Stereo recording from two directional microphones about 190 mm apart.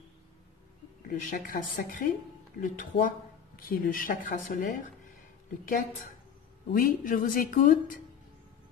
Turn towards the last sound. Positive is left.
turn(degrees=45)  # may be behind; listen again after turning